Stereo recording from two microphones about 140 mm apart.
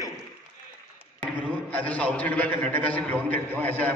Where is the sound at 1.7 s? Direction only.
10° left (ahead or behind).